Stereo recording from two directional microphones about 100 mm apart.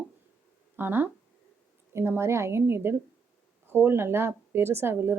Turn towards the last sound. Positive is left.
turn(degrees=-25)  # may be behind; listen again after turning